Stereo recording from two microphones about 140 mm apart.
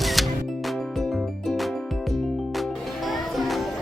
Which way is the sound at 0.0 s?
Centre (ahead or behind).